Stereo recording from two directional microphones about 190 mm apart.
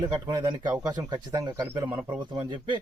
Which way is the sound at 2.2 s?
25° right (ahead or behind).